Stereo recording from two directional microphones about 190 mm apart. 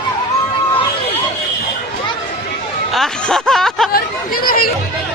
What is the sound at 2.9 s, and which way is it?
Snicker, centre (ahead or behind).